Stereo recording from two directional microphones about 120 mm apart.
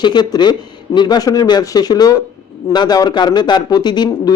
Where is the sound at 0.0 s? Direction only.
35° left (ahead or behind).